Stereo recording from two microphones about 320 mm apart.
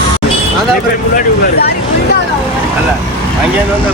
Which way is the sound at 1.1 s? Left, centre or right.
Left.